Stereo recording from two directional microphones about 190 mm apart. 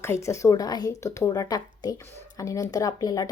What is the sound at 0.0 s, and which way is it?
A woman's voice, 15° left (ahead or behind).